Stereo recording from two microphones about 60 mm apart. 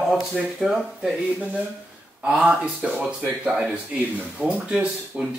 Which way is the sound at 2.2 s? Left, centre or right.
Centre.